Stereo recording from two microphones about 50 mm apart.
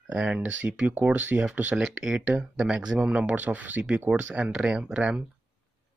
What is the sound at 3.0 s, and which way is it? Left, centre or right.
Speech, right.